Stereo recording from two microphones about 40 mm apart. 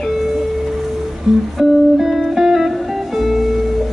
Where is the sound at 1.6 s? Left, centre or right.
Centre.